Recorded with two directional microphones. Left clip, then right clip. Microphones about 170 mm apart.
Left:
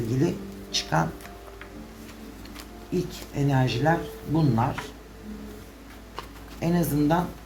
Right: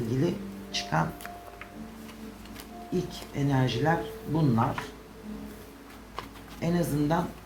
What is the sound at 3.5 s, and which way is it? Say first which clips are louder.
Speech: left 3 dB; 40° left (ahead or behind).